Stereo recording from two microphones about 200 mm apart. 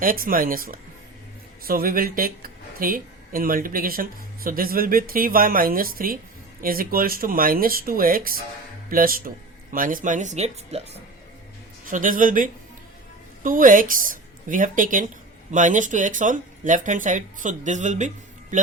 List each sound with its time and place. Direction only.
0.0 s speech: 45° right (ahead or behind)
11.9 s a man's voice: 40° right (ahead or behind)